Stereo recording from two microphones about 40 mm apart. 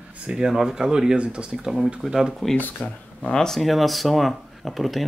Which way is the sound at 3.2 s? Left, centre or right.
Centre.